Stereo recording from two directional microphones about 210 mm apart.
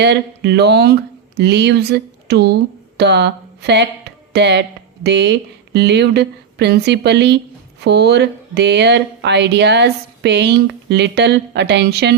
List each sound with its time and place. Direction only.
0.0 s speech: 55° right (ahead or behind)